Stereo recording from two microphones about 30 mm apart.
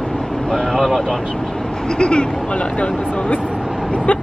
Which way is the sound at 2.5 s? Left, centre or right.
Left.